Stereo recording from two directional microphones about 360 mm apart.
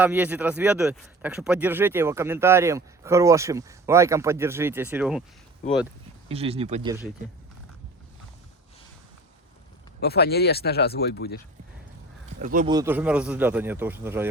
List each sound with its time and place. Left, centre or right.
0.0 s a man's voice: centre
6.2 s a man's voice: centre
10.0 s speech: left
12.4 s speech: right
12.7 s speech: centre